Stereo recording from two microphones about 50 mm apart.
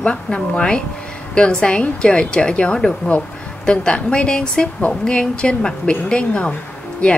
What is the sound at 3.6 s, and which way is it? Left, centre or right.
A woman's voice, centre.